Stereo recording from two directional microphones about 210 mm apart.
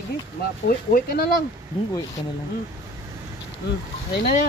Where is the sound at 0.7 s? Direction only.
45° left (ahead or behind).